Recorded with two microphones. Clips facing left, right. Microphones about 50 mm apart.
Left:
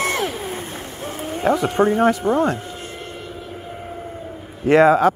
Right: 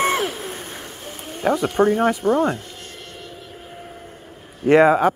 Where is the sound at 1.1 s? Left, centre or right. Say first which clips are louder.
Left 2 dB; centre.